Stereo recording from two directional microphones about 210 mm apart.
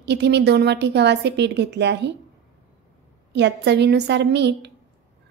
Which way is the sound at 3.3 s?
55° right (ahead or behind).